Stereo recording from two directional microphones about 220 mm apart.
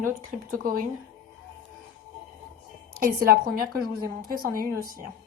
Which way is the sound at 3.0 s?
40° right (ahead or behind).